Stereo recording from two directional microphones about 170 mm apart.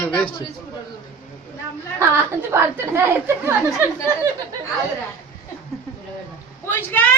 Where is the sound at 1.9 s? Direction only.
15° right (ahead or behind).